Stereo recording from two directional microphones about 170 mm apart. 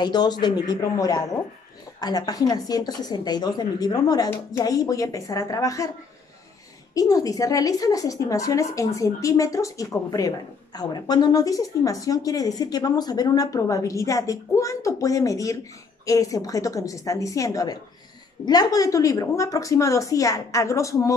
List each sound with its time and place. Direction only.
0.0 s a woman's voice: 25° left (ahead or behind)
6.9 s a woman's voice: 20° left (ahead or behind)